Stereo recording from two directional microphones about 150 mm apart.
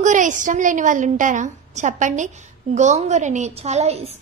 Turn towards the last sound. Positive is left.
turn(degrees=-45)  # may be behind; listen again after turning